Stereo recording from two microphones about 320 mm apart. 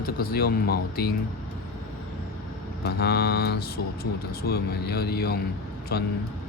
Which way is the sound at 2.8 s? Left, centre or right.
Left.